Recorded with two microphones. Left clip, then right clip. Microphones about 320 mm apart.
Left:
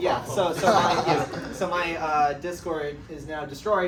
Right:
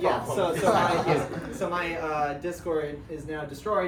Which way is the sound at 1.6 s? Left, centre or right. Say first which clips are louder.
Left 3 dB; centre.